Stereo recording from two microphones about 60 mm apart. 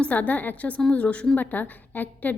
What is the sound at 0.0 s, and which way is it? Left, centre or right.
A woman's voice, left.